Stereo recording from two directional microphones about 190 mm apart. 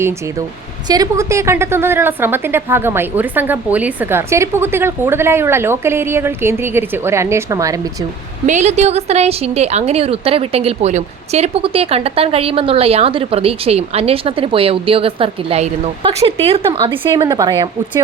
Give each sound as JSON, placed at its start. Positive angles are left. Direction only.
{"t": 0.9, "sound": "a woman's voice", "side_deg": -20}
{"t": 8.4, "sound": "a woman's voice", "side_deg": -40}